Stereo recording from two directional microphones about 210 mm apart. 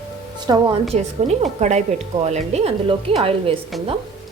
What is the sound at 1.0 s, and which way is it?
A woman's voice, 30° right (ahead or behind).